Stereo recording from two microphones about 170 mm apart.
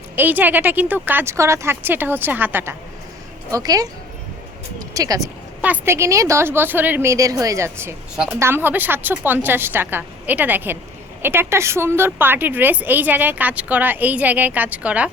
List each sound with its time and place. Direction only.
0.2 s a woman's voice: 10° right (ahead or behind)
8.1 s a woman's voice: 5° right (ahead or behind)
8.4 s a woman's voice: 15° right (ahead or behind)